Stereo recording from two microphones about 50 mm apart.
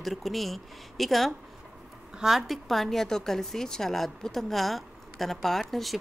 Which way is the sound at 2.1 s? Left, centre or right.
Centre.